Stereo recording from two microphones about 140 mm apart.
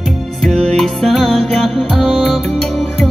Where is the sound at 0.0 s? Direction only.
Centre (ahead or behind).